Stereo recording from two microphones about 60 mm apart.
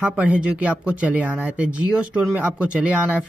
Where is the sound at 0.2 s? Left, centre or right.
Right.